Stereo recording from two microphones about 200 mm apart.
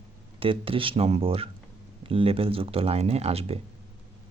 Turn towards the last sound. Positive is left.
turn(degrees=-30)  # may be behind; listen again after turning